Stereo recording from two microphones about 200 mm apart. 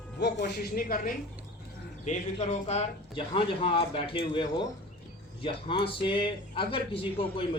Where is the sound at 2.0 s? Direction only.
35° left (ahead or behind).